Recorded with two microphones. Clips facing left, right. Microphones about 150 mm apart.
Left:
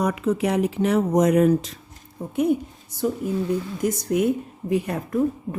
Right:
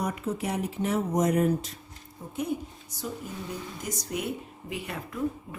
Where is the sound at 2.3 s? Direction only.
60° left (ahead or behind).